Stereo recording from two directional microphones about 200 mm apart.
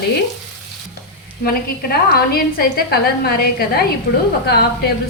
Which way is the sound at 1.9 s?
50° left (ahead or behind).